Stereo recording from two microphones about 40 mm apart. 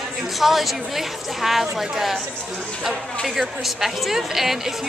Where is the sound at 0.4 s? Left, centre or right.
Centre.